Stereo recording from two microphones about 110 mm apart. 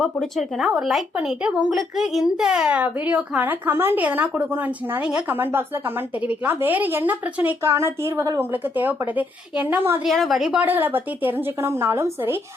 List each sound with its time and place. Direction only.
0.0 s speech: centre (ahead or behind); by 10.0 s 20° right (ahead or behind)
10.0 s a woman's voice: centre (ahead or behind)
10.6 s a woman's voice: 20° right (ahead or behind)